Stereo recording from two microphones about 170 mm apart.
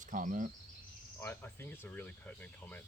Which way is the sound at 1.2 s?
15° left (ahead or behind).